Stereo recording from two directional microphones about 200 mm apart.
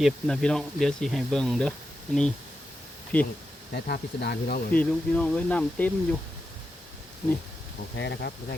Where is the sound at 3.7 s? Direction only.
50° left (ahead or behind).